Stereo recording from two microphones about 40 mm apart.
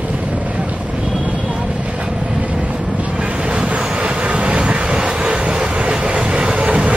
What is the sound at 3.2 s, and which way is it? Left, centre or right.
Vehicle, right.